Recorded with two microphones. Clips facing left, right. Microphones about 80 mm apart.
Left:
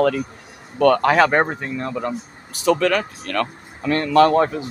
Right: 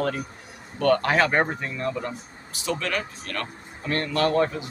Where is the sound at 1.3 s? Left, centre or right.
Left.